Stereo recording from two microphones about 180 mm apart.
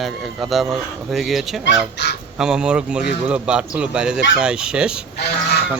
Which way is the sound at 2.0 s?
70° left (ahead or behind).